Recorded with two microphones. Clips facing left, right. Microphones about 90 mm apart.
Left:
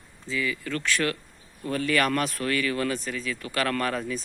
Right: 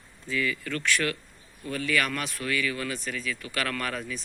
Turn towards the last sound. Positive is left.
turn(degrees=35)  # may be behind; listen again after turning